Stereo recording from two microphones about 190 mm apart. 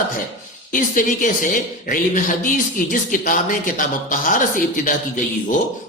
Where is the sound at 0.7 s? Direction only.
45° left (ahead or behind).